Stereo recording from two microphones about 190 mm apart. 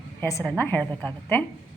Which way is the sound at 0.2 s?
15° left (ahead or behind).